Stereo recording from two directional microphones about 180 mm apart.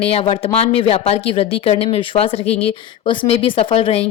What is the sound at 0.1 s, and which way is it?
Speech, 35° left (ahead or behind).